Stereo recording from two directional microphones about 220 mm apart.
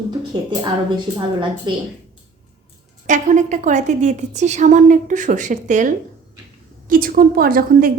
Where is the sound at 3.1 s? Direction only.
35° right (ahead or behind).